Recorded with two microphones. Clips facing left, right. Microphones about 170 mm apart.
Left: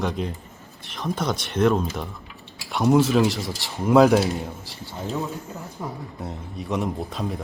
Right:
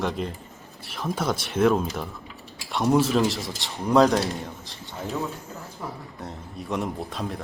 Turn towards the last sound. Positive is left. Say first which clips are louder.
# left 2 dB
turn(degrees=0)  # may be behind; listen again after turning